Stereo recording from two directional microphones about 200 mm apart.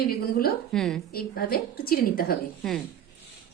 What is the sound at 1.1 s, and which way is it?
A woman's voice, 50° left (ahead or behind).